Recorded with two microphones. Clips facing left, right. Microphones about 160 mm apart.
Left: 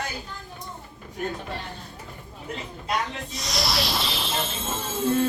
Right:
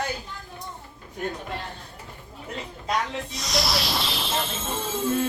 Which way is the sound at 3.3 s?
Centre (ahead or behind).